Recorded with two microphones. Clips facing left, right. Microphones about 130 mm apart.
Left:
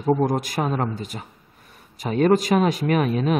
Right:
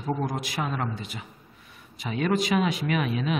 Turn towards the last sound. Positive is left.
turn(degrees=45)  # may be behind; listen again after turning